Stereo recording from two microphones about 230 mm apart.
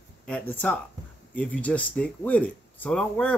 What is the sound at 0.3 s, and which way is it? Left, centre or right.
Speech, centre.